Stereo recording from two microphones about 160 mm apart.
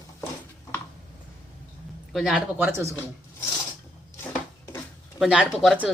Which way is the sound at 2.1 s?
5° right (ahead or behind).